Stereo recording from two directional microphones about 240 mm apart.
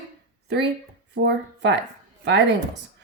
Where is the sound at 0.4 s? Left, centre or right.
Right.